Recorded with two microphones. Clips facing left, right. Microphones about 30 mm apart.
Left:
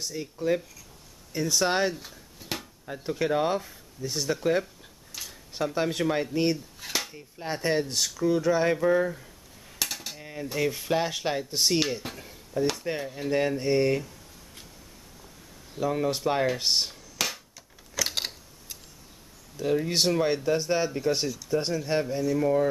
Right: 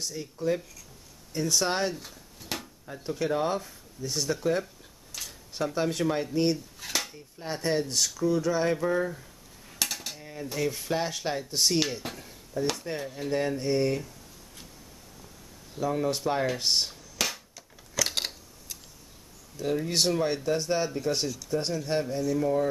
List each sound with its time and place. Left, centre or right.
0.0 s speech: centre
5.1 s dishes: centre
7.4 s speech: centre
9.8 s a sound: centre
10.2 s speech: centre
12.2 s a sound: centre
13.0 s speech: centre
15.8 s a sound: centre
19.5 s speech: centre